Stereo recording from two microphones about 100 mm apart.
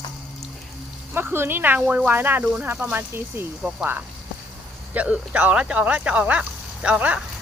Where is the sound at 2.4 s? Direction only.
10° right (ahead or behind).